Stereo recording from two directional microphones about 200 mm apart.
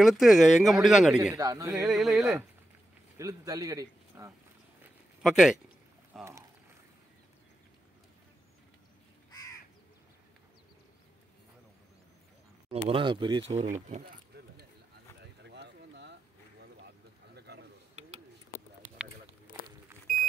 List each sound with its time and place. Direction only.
0.0 s speech: centre (ahead or behind)
1.3 s speech: 15° right (ahead or behind)
1.7 s speech: 5° right (ahead or behind)
3.2 s a man's voice: 15° right (ahead or behind)
4.8 s a sound: centre (ahead or behind)
6.1 s speech: centre (ahead or behind)
12.8 s speech: 25° right (ahead or behind)
15.4 s a sound: 60° right (ahead or behind)